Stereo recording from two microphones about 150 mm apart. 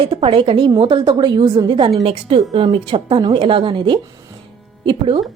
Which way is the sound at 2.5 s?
25° right (ahead or behind).